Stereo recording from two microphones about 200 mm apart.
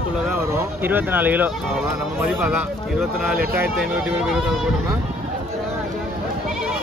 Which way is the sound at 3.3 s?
50° right (ahead or behind).